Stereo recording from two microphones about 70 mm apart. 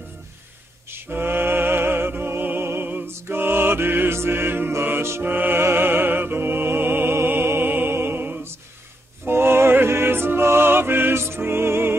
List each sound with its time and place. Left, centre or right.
0.8 s music: right